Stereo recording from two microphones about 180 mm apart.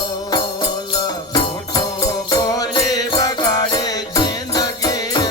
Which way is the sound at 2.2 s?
20° left (ahead or behind).